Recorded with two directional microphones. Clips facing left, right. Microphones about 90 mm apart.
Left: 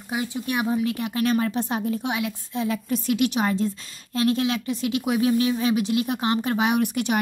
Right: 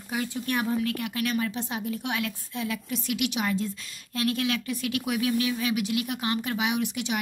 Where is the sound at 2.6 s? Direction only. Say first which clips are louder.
Left 6 dB; 35° left (ahead or behind).